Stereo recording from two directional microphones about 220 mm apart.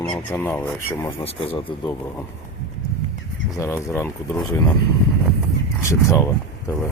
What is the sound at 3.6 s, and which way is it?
Speech, 10° left (ahead or behind).